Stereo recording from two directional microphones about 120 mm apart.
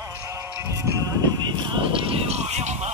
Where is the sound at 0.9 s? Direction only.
30° right (ahead or behind).